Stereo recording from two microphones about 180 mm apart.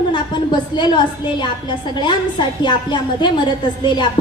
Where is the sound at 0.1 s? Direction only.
25° left (ahead or behind).